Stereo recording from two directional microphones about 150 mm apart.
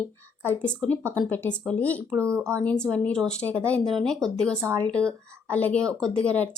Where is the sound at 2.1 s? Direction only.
20° right (ahead or behind).